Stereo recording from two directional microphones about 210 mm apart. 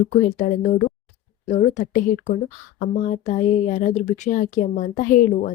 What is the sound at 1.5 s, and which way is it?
Speech, 35° left (ahead or behind).